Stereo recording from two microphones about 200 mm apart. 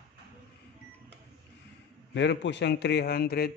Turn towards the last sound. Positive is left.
turn(degrees=50)  # may be behind; listen again after turning